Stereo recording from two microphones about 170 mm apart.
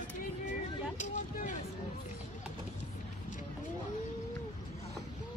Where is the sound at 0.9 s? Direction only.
50° left (ahead or behind).